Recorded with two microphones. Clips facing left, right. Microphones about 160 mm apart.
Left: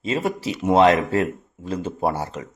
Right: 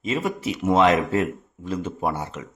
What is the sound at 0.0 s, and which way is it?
A man's voice, 35° left (ahead or behind).